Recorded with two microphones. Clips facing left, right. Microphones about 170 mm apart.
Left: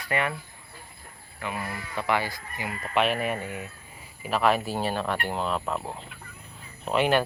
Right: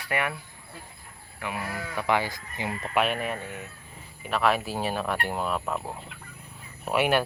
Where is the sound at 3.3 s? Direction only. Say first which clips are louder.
Left 3 dB; 10° left (ahead or behind).